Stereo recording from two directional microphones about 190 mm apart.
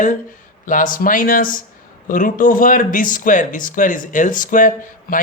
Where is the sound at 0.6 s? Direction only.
45° left (ahead or behind).